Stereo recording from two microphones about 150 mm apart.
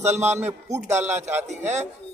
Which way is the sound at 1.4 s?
50° right (ahead or behind).